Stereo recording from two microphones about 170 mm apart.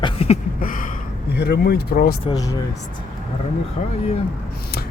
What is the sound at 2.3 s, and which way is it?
Speech, 20° left (ahead or behind).